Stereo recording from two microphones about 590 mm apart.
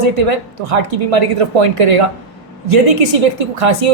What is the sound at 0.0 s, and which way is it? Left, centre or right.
Speech, right.